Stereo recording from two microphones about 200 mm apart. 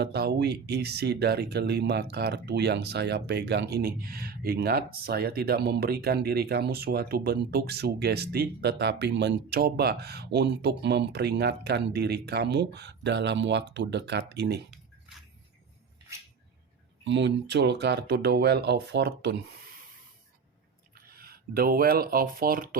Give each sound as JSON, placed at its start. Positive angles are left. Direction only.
{"t": 0.0, "sound": "speech", "side_deg": -55}
{"t": 17.0, "sound": "speech", "side_deg": -65}
{"t": 21.1, "sound": "speech", "side_deg": -50}